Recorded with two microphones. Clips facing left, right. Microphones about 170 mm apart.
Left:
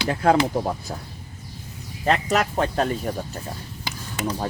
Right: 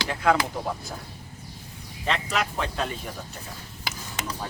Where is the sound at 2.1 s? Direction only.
45° left (ahead or behind).